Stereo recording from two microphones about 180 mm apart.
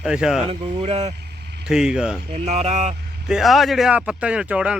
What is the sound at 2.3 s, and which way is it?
Speech, 35° right (ahead or behind).